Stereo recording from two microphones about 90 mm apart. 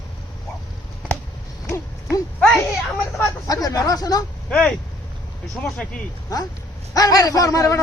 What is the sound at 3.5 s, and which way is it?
Speech, 40° left (ahead or behind).